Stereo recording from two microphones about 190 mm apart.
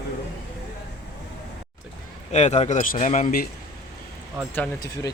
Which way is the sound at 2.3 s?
35° left (ahead or behind).